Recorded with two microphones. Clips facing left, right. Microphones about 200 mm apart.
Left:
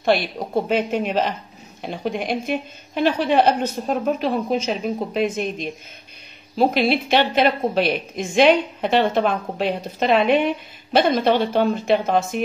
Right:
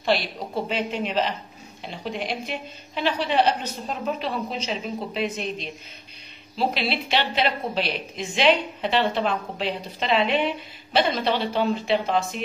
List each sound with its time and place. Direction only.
0.1 s a woman's voice: 50° left (ahead or behind)